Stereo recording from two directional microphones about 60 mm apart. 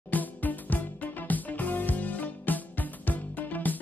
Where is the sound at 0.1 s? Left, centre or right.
Left.